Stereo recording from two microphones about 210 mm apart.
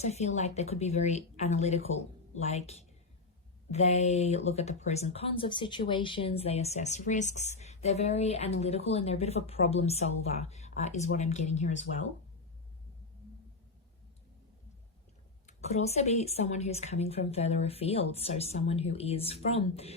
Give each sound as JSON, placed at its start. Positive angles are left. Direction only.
{"t": 0.0, "sound": "speech", "side_deg": 30}
{"t": 15.4, "sound": "speech", "side_deg": 30}